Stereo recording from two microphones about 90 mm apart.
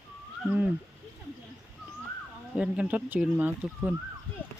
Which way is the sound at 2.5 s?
10° right (ahead or behind).